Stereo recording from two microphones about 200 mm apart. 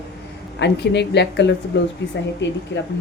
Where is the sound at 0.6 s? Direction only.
60° left (ahead or behind).